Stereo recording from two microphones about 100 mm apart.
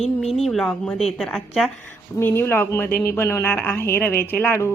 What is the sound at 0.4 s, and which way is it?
Speech, 5° left (ahead or behind).